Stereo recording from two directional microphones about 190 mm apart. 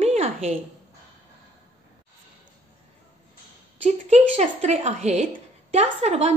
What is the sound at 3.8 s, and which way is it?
A woman's voice, 35° right (ahead or behind).